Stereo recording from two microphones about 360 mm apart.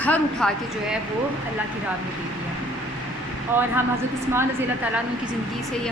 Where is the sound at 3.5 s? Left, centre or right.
Centre.